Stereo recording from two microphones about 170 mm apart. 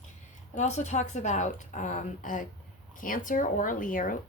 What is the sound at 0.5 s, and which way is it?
A woman's voice, 40° left (ahead or behind).